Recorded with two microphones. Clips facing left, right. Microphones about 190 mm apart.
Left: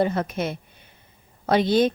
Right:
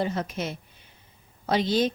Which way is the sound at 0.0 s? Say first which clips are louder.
Left 5 dB; 55° left (ahead or behind).